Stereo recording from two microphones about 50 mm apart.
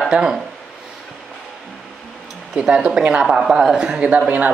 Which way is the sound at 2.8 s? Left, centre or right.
Right.